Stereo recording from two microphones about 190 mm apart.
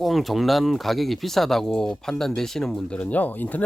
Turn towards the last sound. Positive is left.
turn(degrees=10)  # may be behind; listen again after turning